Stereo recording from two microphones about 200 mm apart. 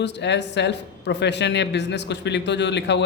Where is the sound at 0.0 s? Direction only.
60° left (ahead or behind).